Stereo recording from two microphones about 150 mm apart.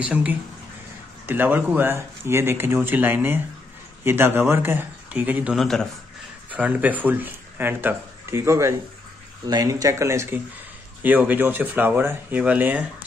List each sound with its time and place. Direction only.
0.0 s speech: 10° right (ahead or behind)
6.5 s speech: 10° right (ahead or behind)